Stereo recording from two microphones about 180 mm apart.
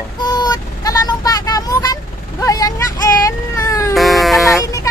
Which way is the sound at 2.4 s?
20° left (ahead or behind).